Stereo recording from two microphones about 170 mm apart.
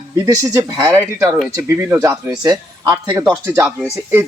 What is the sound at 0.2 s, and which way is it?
A man's voice, 20° right (ahead or behind).